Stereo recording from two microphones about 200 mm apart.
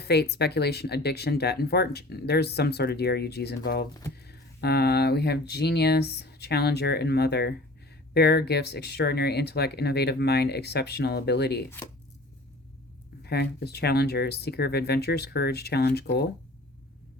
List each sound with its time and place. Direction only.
0.0 s speech: 55° left (ahead or behind)
13.2 s speech: 55° left (ahead or behind)